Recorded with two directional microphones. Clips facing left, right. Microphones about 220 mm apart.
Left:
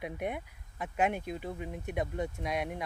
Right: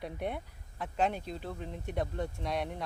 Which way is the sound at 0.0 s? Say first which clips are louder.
Left 1 dB; 15° left (ahead or behind).